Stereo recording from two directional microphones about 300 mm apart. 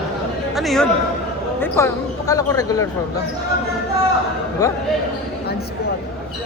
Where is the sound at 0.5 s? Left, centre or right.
Centre.